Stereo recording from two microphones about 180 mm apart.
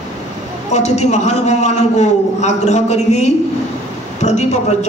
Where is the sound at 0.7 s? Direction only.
40° left (ahead or behind).